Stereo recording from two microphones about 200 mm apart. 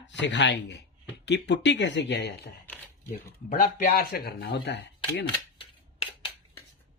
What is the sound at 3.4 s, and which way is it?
Speech, 45° left (ahead or behind).